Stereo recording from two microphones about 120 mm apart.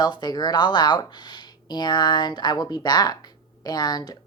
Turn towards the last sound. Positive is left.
turn(degrees=35)  # may be behind; listen again after turning